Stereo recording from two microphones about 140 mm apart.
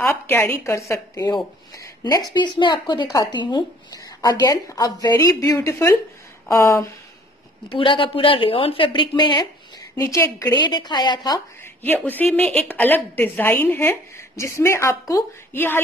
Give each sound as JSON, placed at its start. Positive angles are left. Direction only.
{"t": 0.0, "sound": "a woman's voice", "side_deg": 15}
{"t": 7.7, "sound": "a woman's voice", "side_deg": 35}
{"t": 11.8, "sound": "a woman's voice", "side_deg": 10}